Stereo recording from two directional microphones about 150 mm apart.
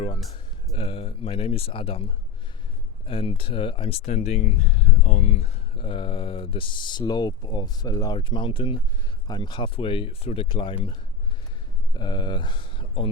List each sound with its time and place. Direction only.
0.8 s speech: 35° left (ahead or behind)
3.1 s speech: 40° left (ahead or behind)
11.9 s speech: 30° left (ahead or behind)